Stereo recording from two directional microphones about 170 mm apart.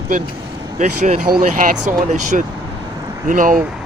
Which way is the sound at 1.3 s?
55° right (ahead or behind).